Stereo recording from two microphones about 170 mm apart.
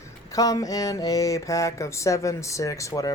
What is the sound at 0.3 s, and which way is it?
Speech, 20° left (ahead or behind).